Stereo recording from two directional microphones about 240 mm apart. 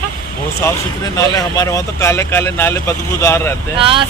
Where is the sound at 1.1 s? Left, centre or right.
Centre.